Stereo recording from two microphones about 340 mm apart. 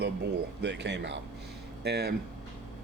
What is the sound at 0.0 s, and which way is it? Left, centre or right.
Speech, right.